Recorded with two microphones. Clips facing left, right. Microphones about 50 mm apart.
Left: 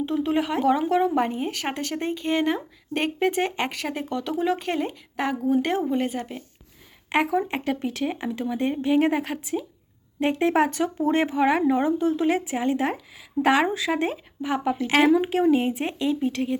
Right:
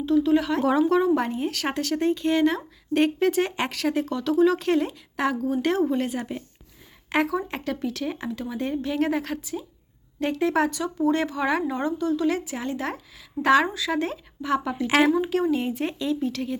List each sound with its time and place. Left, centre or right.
0.0 s speech: left; by 5.4 s centre
5.4 s speech: left
5.9 s speech: centre
7.3 s speech: left; by 15.1 s centre
15.4 s speech: centre